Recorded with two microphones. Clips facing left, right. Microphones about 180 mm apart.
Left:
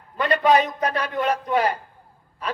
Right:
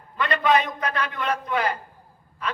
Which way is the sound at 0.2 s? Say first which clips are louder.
Left 3 dB; 40° left (ahead or behind).